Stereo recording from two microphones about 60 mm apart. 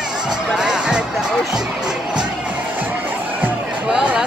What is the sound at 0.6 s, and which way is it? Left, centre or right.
Music, centre.